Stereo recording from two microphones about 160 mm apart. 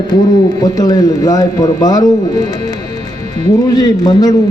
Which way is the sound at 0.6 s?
25° left (ahead or behind).